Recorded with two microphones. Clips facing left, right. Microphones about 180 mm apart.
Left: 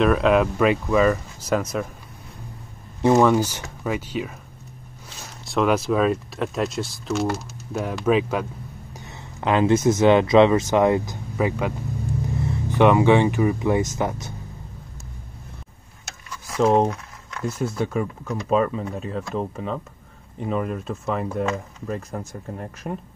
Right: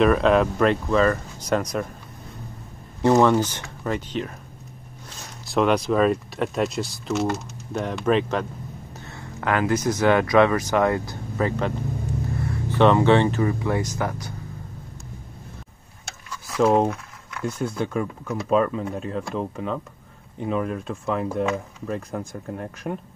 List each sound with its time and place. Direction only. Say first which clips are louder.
0.0 s speech: even; centre (ahead or behind)
3.1 s speech: left 1 dB; 5° left (ahead or behind)
5.4 s speech: even; centre (ahead or behind)
9.1 s speech: left 3 dB; 20° left (ahead or behind)
16.5 s speech: even; centre (ahead or behind)